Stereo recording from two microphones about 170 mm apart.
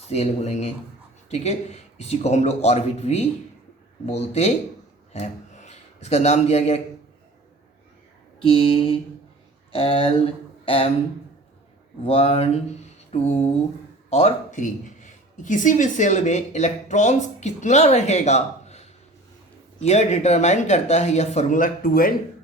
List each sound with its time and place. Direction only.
0.1 s speech: 40° left (ahead or behind)
8.4 s speech: 30° left (ahead or behind)
9.7 s a sound: 30° left (ahead or behind)
12.0 s a woman's voice: 35° left (ahead or behind); by 22.1 s 55° left (ahead or behind)